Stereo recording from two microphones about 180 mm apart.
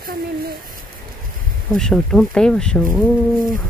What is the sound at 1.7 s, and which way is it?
Speech, centre (ahead or behind).